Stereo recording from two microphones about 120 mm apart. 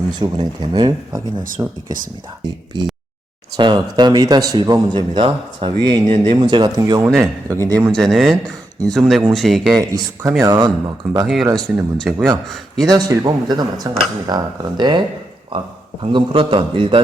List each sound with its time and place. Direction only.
0.1 s speech: 35° right (ahead or behind)
2.7 s speech: 35° right (ahead or behind)
6.1 s speech: 70° right (ahead or behind)
6.4 s speech: 35° right (ahead or behind)
7.9 s speech: 5° left (ahead or behind)
9.7 s speech: 30° right (ahead or behind)
12.1 s a man's voice: 10° right (ahead or behind)
12.9 s a man's voice: 30° right (ahead or behind)